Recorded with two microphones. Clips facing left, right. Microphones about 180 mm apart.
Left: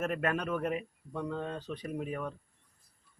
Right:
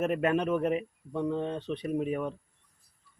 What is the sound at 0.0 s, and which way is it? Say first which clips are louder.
Speech: right 5 dB; 15° right (ahead or behind).